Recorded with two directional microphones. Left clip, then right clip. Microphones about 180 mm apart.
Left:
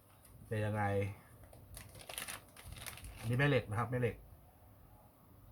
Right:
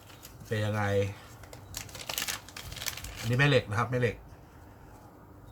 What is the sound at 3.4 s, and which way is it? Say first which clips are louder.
Speech: right 8 dB; centre (ahead or behind).